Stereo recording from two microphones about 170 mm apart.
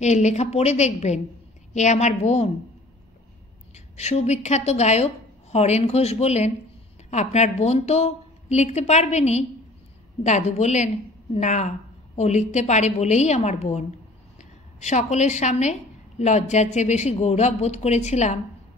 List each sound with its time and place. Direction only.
0.0 s a woman's voice: 45° left (ahead or behind)
3.7 s a woman's voice: 40° left (ahead or behind)